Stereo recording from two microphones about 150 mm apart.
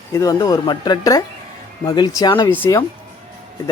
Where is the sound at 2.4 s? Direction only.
15° left (ahead or behind).